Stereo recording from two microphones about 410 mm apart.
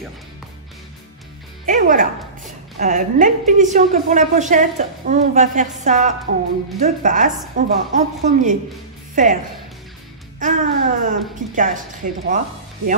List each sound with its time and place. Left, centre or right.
1.7 s a woman's voice: centre
10.4 s a woman's voice: centre